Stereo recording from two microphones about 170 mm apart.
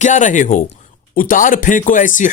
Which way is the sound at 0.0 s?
45° left (ahead or behind).